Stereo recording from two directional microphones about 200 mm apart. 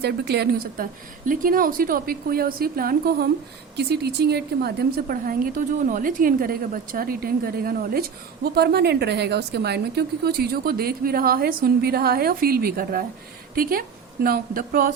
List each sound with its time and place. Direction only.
0.0 s a woman's voice: 55° right (ahead or behind)